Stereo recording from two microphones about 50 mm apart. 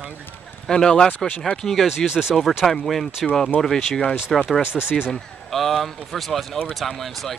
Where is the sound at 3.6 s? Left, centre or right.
Centre.